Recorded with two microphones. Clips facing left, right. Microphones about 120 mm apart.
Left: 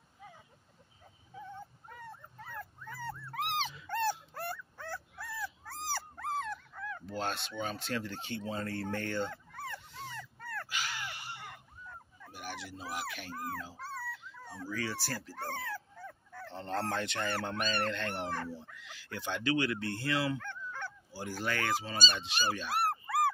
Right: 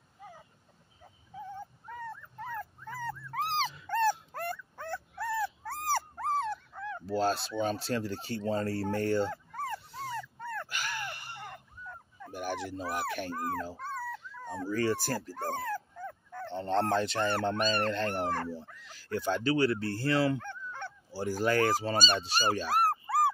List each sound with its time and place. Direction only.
2.4 s dog: 45° right (ahead or behind)
3.7 s dog: 45° right (ahead or behind)
10.4 s dog: 25° right (ahead or behind)
10.7 s gasp: 50° right (ahead or behind)
12.3 s dog: 45° right (ahead or behind)
16.4 s speech: 25° right (ahead or behind)
20.3 s honk: 25° right (ahead or behind)
21.1 s speech: 40° right (ahead or behind)
21.9 s speech: 55° right (ahead or behind)
22.2 s a sound: 40° right (ahead or behind)